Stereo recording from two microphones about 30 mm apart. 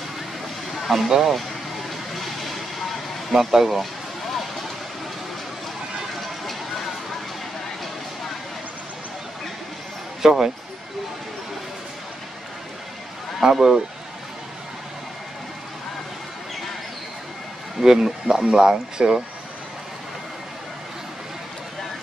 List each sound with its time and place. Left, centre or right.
0.9 s speech: centre
2.1 s vehicle: centre
3.3 s speech: centre
10.2 s speech: centre
13.4 s speech: centre
17.7 s speech: centre